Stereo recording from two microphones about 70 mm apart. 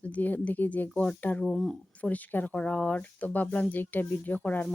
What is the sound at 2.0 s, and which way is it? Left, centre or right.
Speech, left.